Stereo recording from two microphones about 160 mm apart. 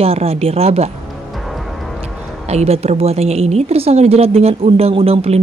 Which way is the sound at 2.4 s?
40° right (ahead or behind).